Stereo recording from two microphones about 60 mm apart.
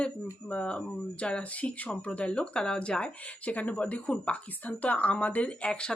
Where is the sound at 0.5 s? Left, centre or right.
Centre.